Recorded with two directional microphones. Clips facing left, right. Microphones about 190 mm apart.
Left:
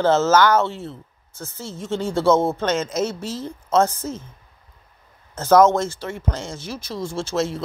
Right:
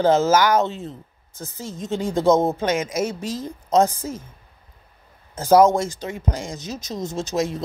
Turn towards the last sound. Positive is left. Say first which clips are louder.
# even
turn(degrees=-15)  # may be behind; listen again after turning